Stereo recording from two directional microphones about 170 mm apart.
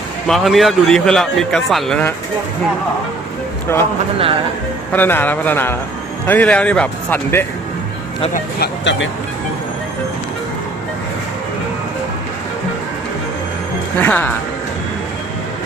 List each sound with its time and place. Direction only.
0.3 s a man's voice: centre (ahead or behind)
3.7 s speech: 15° left (ahead or behind)
4.9 s speech: 10° left (ahead or behind)
8.3 s speech: 65° left (ahead or behind); by 9.0 s 90° left
14.0 s speech: 10° left (ahead or behind)